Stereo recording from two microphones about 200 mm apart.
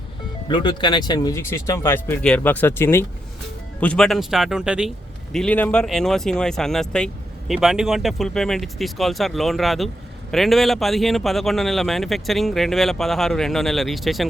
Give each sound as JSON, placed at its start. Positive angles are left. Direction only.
{"t": 0.4, "sound": "speech", "side_deg": 25}